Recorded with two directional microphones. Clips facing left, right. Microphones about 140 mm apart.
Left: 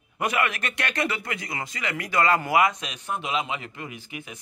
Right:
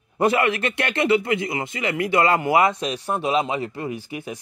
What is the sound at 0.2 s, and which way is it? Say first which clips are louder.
A man's voice: right 7 dB; 30° right (ahead or behind).